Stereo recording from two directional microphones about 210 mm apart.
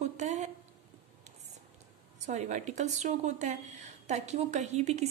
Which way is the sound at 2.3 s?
35° right (ahead or behind).